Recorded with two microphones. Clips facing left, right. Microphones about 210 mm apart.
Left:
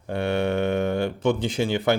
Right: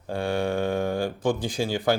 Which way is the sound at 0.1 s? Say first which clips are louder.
Left 2 dB; 25° left (ahead or behind).